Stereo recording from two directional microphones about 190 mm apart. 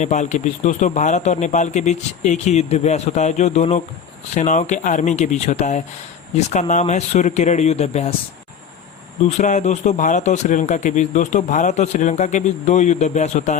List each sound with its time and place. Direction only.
0.0 s a man's voice: 40° left (ahead or behind)
9.4 s a man's voice: 40° left (ahead or behind)